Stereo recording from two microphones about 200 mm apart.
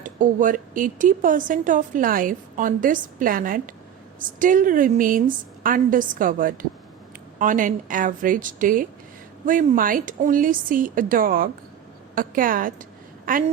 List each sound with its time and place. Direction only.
0.0 s speech: 40° right (ahead or behind)